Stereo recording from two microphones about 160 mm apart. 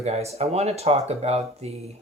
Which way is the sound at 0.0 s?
40° right (ahead or behind).